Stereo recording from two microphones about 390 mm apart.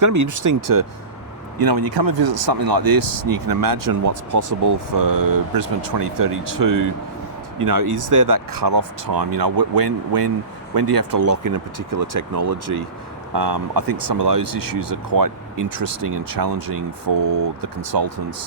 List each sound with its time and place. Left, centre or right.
0.0 s speech: right
1.5 s speech: right